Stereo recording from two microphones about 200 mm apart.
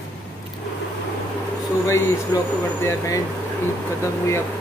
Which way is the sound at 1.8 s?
15° left (ahead or behind).